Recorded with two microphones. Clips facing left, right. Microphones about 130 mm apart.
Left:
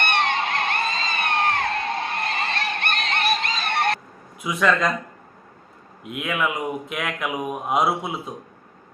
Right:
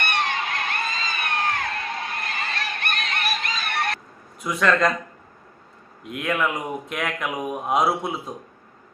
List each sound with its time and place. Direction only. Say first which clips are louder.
0.0 s music: left 3 dB; 25° left (ahead or behind)
4.4 s speech: right 1 dB; centre (ahead or behind)
6.0 s speech: right 1 dB; centre (ahead or behind)